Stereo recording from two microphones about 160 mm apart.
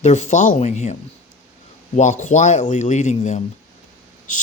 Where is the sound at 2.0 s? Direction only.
50° left (ahead or behind).